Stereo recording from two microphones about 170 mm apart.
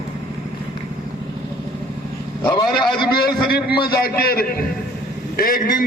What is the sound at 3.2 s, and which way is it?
A man's voice, 65° left (ahead or behind).